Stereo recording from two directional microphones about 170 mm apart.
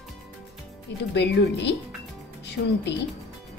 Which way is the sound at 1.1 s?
90° left.